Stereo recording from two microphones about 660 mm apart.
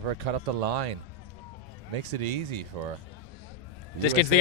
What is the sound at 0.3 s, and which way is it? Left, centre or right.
Speech, right.